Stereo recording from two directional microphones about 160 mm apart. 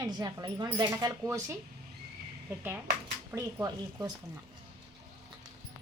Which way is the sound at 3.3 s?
20° right (ahead or behind).